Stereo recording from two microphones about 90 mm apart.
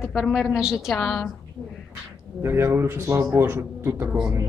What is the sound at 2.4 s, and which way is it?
Speech, 30° right (ahead or behind).